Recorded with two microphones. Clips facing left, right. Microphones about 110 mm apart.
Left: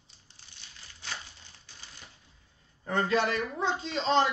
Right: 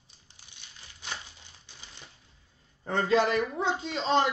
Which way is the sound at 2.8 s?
25° right (ahead or behind).